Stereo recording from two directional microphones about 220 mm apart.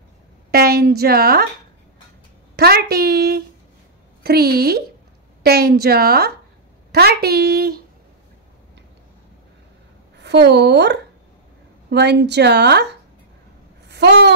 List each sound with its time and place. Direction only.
0.5 s a woman's voice: 45° right (ahead or behind)
2.5 s a woman's voice: 45° right (ahead or behind)
10.1 s a woman's voice: 50° right (ahead or behind)
13.8 s a sound: 50° right (ahead or behind)